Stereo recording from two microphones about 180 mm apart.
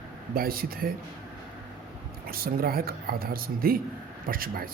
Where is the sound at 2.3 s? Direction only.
55° right (ahead or behind).